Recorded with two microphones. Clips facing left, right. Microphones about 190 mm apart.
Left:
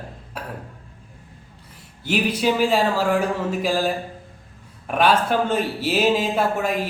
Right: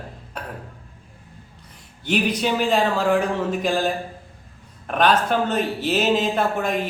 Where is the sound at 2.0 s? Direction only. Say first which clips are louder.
Left 1 dB; 5° left (ahead or behind).